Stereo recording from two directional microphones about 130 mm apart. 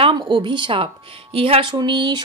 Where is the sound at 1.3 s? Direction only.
45° right (ahead or behind).